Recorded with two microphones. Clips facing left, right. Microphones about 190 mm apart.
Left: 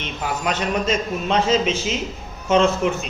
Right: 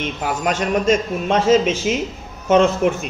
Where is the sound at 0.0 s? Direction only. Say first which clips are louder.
Right 3 dB; 50° right (ahead or behind).